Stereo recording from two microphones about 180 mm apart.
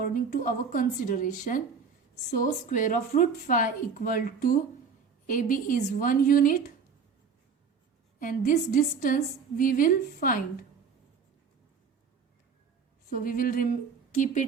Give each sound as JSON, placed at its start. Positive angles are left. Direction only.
{"t": 0.0, "sound": "a woman's voice", "side_deg": 50}
{"t": 8.2, "sound": "a woman's voice", "side_deg": 50}
{"t": 13.1, "sound": "a woman's voice", "side_deg": 50}